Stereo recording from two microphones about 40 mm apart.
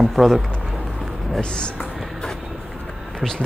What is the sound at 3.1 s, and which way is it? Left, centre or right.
Speech, centre.